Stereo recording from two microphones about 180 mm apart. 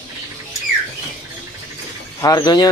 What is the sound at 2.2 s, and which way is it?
Speech, 20° left (ahead or behind).